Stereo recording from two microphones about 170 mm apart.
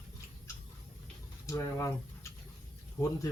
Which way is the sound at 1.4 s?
20° left (ahead or behind).